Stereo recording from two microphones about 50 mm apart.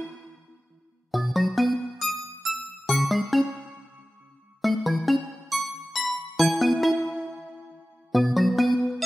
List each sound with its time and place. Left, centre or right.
1.1 s music: centre